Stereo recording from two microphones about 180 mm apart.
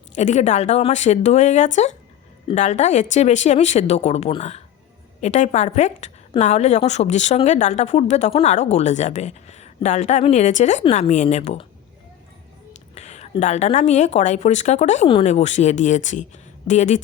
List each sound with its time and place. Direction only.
0.2 s a woman's voice: 40° left (ahead or behind)
12.9 s a woman's voice: 35° left (ahead or behind)